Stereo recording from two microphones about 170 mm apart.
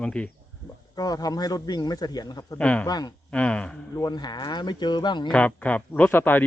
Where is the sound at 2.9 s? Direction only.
25° left (ahead or behind).